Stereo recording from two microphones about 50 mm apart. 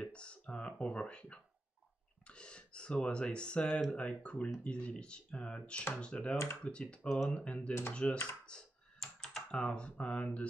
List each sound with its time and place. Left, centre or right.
0.0 s a sound: left
0.7 s speech: left
2.2 s speech: left
9.0 s computer keyboard: centre
9.5 s speech: left